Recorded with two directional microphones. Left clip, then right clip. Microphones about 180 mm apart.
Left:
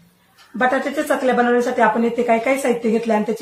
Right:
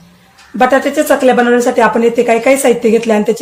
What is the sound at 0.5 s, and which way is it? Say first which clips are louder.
Speech: right 7 dB; 40° right (ahead or behind).